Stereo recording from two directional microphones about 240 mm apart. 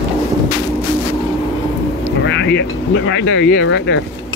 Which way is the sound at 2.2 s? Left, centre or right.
Left.